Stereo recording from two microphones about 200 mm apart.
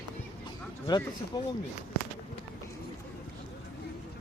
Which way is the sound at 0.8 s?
20° left (ahead or behind).